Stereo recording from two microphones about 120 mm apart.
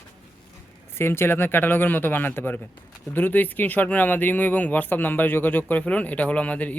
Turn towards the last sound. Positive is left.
turn(degrees=10)  # may be behind; listen again after turning